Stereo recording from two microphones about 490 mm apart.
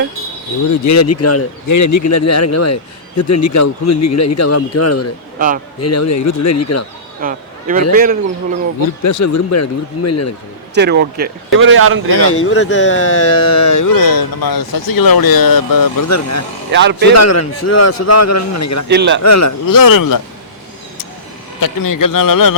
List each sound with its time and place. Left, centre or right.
0.9 s speech: left
7.2 s speech: centre
9.0 s speech: left
10.8 s speech: centre
12.3 s speech: left
16.7 s speech: right
17.2 s speech: left
18.9 s speech: right
19.2 s speech: left
21.6 s speech: left